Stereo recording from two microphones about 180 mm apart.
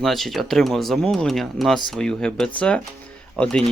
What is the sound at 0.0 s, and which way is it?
Speech, centre (ahead or behind).